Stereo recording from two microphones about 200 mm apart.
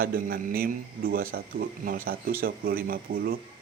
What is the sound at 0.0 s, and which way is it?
Speech, 45° right (ahead or behind).